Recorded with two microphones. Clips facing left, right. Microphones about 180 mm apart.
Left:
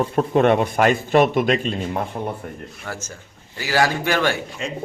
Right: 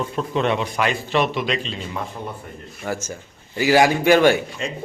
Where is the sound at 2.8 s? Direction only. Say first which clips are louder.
Right 8 dB; 15° right (ahead or behind).